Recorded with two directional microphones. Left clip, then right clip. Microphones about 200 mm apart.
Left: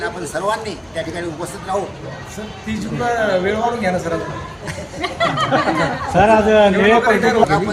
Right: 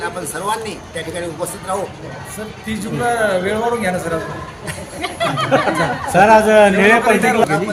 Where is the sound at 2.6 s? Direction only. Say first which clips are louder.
Right 1 dB; 10° right (ahead or behind).